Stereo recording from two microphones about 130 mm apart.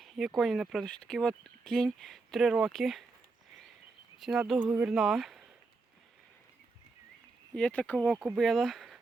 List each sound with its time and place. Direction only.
0.0 s speech: centre (ahead or behind)
4.2 s speech: centre (ahead or behind)
4.6 s speech: 10° right (ahead or behind)
4.9 s speech: centre (ahead or behind)
7.5 s speech: 10° left (ahead or behind)